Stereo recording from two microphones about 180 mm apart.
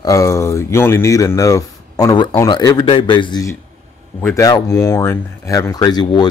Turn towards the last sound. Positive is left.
turn(degrees=25)  # may be behind; listen again after turning